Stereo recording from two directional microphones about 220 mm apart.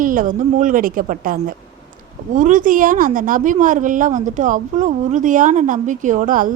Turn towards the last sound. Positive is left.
turn(degrees=-40)  # may be behind; listen again after turning